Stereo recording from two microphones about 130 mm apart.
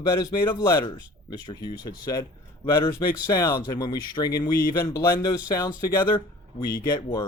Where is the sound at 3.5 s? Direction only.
30° left (ahead or behind).